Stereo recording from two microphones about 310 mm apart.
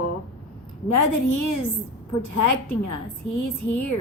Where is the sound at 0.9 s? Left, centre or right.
Left.